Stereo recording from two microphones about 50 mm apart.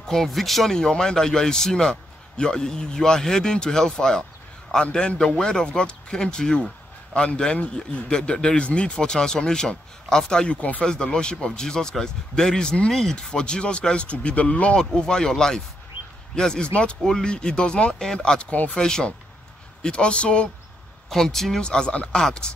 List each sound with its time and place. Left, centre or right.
0.0 s a man's voice: centre
10.6 s speech: left
10.9 s a man's voice: centre
14.8 s a man's voice: centre
18.5 s speech: left
18.9 s a man's voice: centre
21.1 s a man's voice: centre